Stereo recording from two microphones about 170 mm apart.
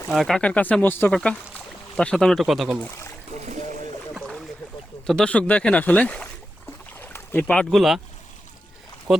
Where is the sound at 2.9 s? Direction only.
15° left (ahead or behind).